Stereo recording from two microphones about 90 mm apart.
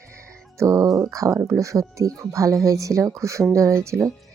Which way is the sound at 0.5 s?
35° right (ahead or behind).